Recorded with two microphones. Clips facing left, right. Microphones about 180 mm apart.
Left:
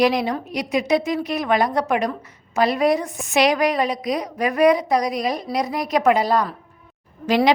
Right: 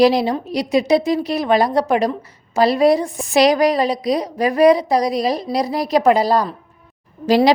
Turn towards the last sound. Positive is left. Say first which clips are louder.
# right 4 dB
turn(degrees=-35)  # may be behind; listen again after turning